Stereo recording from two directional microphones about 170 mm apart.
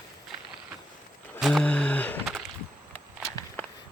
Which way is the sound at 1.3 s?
Centre (ahead or behind).